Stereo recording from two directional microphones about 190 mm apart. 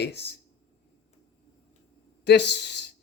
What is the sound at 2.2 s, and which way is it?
Speech, 65° left (ahead or behind).